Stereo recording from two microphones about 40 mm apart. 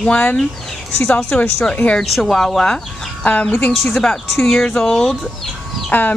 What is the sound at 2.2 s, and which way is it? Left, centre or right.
Speech, centre.